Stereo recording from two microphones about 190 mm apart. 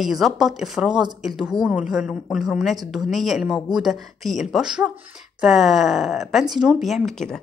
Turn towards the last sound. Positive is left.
turn(degrees=0)  # may be behind; listen again after turning